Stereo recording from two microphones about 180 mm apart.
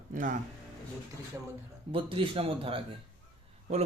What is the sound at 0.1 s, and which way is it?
Speech, 45° right (ahead or behind).